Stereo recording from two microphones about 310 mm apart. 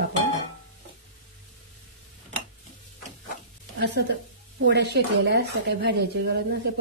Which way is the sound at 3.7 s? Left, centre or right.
Right.